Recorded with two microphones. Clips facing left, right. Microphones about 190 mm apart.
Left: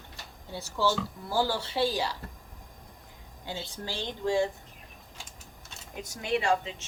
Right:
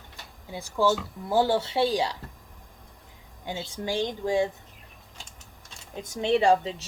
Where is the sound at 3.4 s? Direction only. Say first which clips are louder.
Right 5 dB; 15° right (ahead or behind).